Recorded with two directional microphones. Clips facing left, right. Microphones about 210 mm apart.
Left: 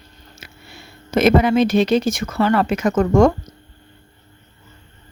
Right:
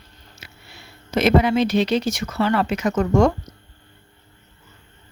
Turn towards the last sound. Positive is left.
turn(degrees=50)  # may be behind; listen again after turning